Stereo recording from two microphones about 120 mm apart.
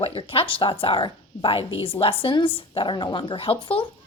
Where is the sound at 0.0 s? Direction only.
50° left (ahead or behind).